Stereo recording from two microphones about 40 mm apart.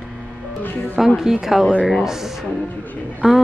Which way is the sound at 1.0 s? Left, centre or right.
Centre.